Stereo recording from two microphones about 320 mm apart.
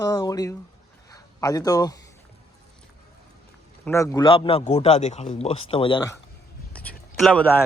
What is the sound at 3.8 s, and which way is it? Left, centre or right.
Speech, centre.